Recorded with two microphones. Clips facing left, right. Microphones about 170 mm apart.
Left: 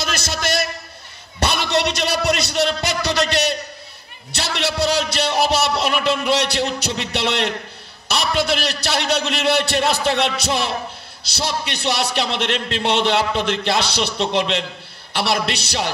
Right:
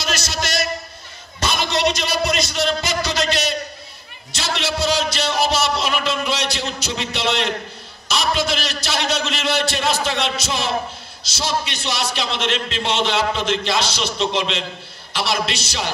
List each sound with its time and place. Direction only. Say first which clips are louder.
0.0 s a sound: left 1 dB; 55° left (ahead or behind)
1.4 s a man's voice: left 1 dB; 65° left (ahead or behind)
4.3 s a man's voice: left 1 dB; 65° left (ahead or behind)